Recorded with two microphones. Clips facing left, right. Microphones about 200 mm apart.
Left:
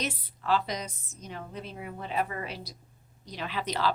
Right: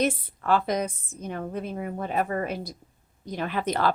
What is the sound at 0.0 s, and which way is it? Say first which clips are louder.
Speech: right 9 dB; 50° right (ahead or behind).